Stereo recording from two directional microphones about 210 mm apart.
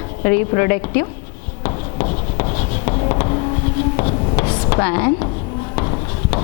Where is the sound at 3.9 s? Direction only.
30° left (ahead or behind).